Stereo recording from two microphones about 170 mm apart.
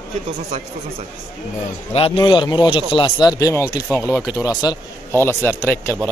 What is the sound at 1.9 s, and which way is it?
A man's voice, 30° left (ahead or behind).